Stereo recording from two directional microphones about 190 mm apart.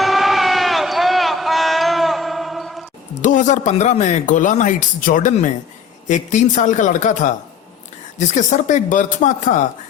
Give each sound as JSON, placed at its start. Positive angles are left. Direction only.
{"t": 0.0, "sound": "music", "side_deg": 0}
{"t": 3.2, "sound": "speech", "side_deg": 40}